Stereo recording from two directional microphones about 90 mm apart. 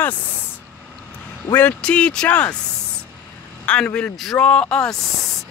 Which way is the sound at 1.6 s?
15° left (ahead or behind).